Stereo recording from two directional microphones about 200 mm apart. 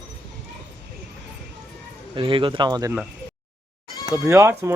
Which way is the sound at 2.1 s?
25° right (ahead or behind).